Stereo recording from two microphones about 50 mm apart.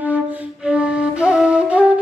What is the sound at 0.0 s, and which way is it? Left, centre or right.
Flute, right.